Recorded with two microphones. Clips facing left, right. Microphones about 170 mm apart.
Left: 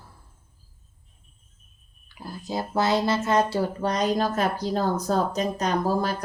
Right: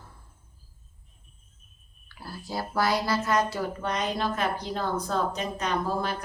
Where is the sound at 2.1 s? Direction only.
20° left (ahead or behind); by 6.1 s 40° left (ahead or behind).